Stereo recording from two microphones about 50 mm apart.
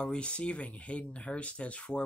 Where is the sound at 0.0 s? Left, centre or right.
Centre.